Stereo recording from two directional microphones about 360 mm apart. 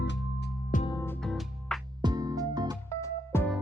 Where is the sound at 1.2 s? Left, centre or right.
Centre.